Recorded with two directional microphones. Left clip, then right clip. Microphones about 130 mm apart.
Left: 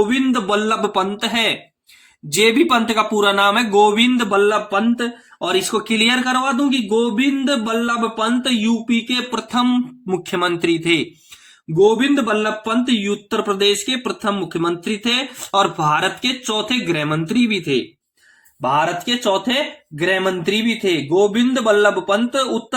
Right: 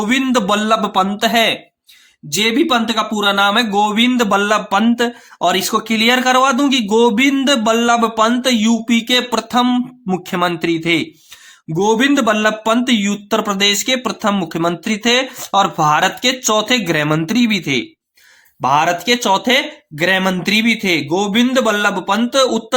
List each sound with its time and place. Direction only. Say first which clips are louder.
0.1 s speech: right 3 dB; 65° right (ahead or behind)
0.6 s speech: right 3 dB; 40° right (ahead or behind)
2.3 s speech: even; 10° right (ahead or behind); by 4.3 s 35° right (ahead or behind)
4.3 s speech: right 2 dB; 60° right (ahead or behind)
5.8 s speech: right 3 dB; 35° right (ahead or behind)
6.1 s speech: right 5 dB; 55° right (ahead or behind)
9.5 s speech: right 3 dB; 35° right (ahead or behind)
11.7 s speech: even; 55° right (ahead or behind)
15.4 s speech: right 3 dB; 35° right (ahead or behind); by 22.4 s 65° right (ahead or behind)